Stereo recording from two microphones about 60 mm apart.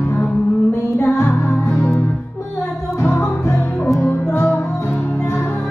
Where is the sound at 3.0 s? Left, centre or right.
Left.